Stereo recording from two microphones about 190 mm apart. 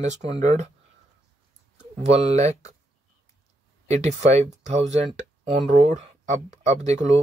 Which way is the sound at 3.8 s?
35° right (ahead or behind).